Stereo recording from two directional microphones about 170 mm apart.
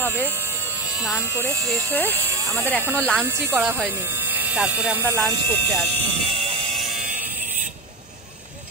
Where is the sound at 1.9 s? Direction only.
10° left (ahead or behind).